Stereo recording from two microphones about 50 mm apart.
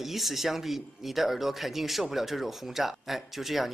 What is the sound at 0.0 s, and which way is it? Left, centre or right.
Speech, centre.